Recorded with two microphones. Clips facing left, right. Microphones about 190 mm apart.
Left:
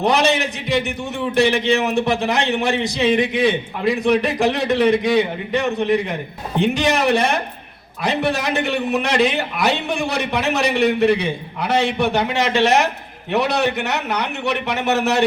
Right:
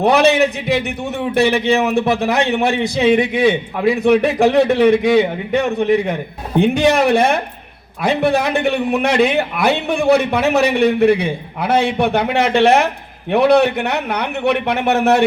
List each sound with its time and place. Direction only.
0.0 s a man's voice: 55° right (ahead or behind)